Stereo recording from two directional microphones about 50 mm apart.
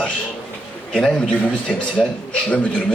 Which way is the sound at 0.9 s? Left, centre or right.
Centre.